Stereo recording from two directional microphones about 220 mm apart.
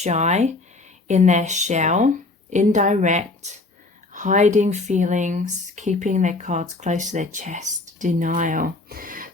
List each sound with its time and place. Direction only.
0.0 s speech: 30° right (ahead or behind)